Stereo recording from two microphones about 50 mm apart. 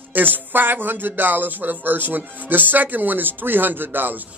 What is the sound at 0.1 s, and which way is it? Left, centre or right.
Speech, right.